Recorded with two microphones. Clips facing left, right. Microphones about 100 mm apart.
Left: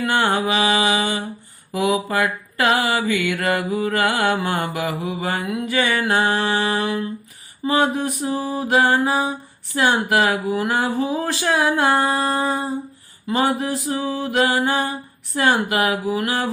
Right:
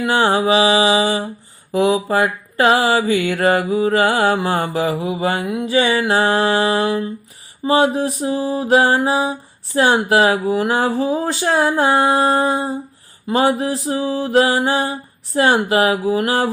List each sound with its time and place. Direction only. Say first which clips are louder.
0.0 s mantra: right 4 dB; 25° right (ahead or behind)
6.1 s speech: right 4 dB; 35° right (ahead or behind)
7.6 s mantra: right 4 dB; 30° right (ahead or behind)
9.7 s speech: right 4 dB; 35° right (ahead or behind)
14.4 s mantra: right 2 dB; 25° right (ahead or behind)
15.4 s speech: right 4 dB; 30° right (ahead or behind)